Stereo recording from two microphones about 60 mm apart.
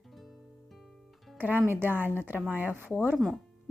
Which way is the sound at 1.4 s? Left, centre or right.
Right.